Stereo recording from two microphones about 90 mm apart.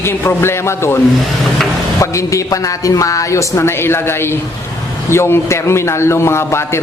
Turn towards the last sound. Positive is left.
turn(degrees=30)  # may be behind; listen again after turning